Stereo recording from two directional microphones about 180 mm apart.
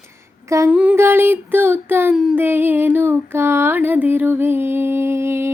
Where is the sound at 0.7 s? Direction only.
10° right (ahead or behind).